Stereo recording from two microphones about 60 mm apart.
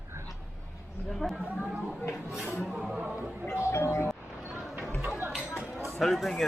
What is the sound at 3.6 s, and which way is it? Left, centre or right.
Doorbell, left.